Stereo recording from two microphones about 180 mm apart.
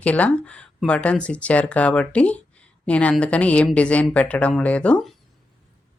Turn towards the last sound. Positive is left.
turn(degrees=5)  # may be behind; listen again after turning